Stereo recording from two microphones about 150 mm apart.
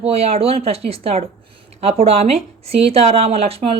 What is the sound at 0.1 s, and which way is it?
A woman's voice, 40° right (ahead or behind).